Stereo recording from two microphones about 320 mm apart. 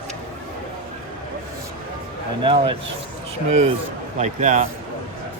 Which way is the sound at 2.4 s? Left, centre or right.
Centre.